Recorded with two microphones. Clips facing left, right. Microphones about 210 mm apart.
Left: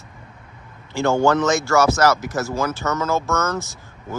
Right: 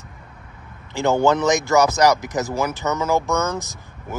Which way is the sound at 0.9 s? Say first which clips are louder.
Even; 15° right (ahead or behind).